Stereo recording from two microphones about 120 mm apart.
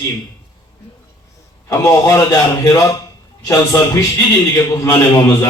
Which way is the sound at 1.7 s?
25° left (ahead or behind).